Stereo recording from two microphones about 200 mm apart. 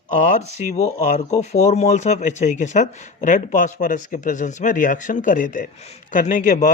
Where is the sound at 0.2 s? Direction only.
40° left (ahead or behind).